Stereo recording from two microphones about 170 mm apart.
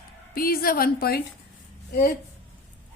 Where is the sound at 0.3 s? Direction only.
60° left (ahead or behind).